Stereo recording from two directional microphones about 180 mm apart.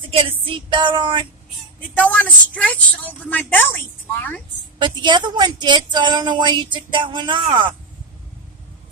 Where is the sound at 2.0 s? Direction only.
10° left (ahead or behind).